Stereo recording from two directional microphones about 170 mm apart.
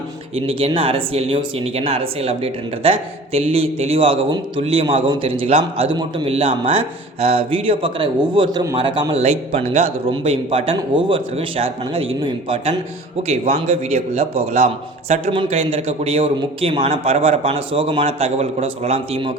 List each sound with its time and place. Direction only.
0.3 s speech: 35° right (ahead or behind)